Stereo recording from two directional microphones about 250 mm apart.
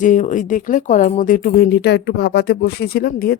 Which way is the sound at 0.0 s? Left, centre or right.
Left.